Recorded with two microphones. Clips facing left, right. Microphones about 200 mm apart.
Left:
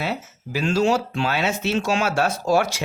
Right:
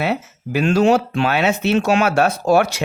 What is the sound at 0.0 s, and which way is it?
Speech, 65° right (ahead or behind).